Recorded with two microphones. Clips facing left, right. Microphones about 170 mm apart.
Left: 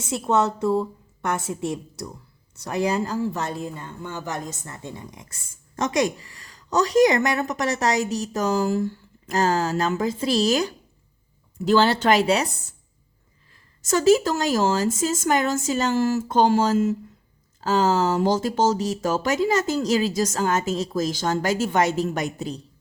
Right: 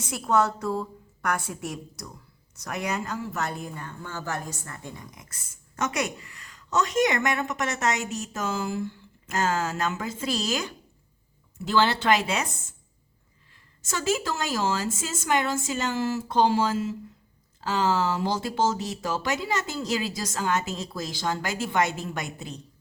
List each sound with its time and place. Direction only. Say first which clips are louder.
0.0 s speech: left 2 dB; 25° left (ahead or behind)
13.8 s speech: left 10 dB; 40° left (ahead or behind)